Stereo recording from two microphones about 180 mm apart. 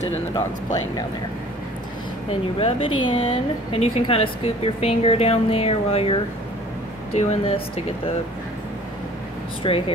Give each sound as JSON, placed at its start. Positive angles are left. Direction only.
{"t": 2.6, "sound": "a woman's voice", "side_deg": 30}
{"t": 9.6, "sound": "speech", "side_deg": 30}